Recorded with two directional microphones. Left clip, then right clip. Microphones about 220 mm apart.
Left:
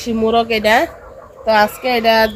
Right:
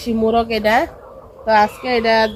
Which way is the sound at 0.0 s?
20° left (ahead or behind).